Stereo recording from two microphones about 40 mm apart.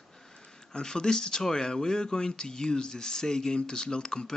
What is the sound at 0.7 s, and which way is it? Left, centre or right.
Speech, centre.